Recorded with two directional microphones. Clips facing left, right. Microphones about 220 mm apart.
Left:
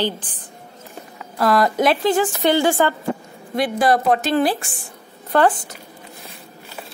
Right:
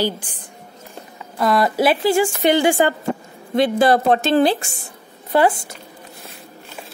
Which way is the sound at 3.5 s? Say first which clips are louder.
Right 3 dB; 25° right (ahead or behind).